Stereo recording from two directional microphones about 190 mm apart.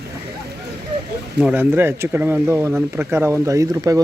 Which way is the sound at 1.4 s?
5° right (ahead or behind).